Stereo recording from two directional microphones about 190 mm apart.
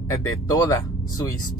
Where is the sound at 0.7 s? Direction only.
20° left (ahead or behind).